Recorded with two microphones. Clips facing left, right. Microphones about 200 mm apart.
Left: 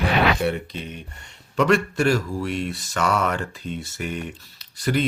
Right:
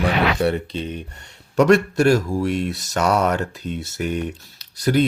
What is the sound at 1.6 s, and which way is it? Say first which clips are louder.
Speech: right 5 dB; 40° right (ahead or behind).